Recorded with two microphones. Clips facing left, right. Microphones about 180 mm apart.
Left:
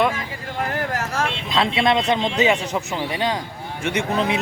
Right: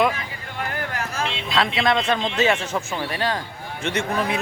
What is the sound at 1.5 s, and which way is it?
A man's voice, 25° left (ahead or behind).